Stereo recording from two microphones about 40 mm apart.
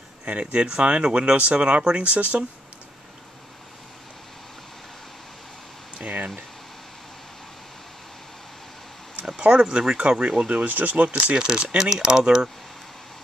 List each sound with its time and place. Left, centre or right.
0.2 s speech: right
5.9 s a sound: right
9.4 s speech: right
10.5 s speech: right
11.3 s speech: centre